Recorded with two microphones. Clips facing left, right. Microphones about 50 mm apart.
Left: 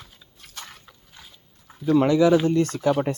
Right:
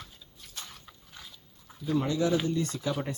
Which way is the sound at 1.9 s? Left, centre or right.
Left.